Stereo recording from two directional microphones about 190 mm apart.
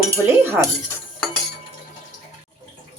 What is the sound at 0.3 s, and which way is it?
Cutlery, 10° right (ahead or behind).